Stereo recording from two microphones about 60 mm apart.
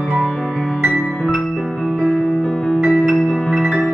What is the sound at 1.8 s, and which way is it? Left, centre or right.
Music, centre.